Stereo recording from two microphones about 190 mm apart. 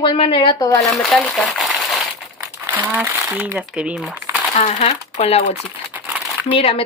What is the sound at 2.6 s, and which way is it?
Speech, 10° right (ahead or behind).